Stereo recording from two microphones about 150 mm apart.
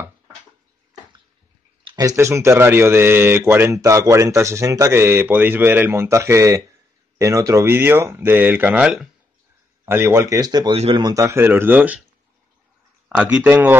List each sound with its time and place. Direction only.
1.9 s a man's voice: 25° right (ahead or behind); by 9.1 s 5° right (ahead or behind)
9.8 s speech: 15° right (ahead or behind)
10.7 s a man's voice: 35° right (ahead or behind); by 12.0 s 10° right (ahead or behind)
13.1 s a man's voice: 5° right (ahead or behind)